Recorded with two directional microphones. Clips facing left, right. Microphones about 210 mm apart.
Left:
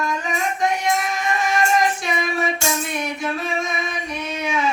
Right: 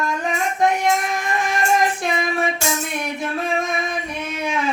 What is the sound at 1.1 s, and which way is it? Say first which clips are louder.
Music: even; 55° right (ahead or behind).